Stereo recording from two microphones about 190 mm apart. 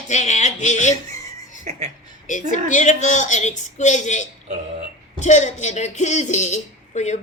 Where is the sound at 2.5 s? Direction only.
40° left (ahead or behind).